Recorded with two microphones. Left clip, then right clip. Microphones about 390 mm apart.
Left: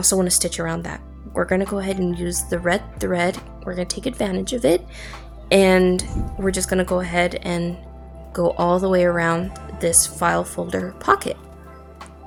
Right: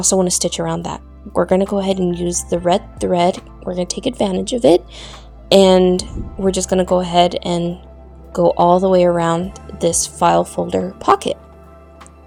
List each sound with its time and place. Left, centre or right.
0.0 s speech: left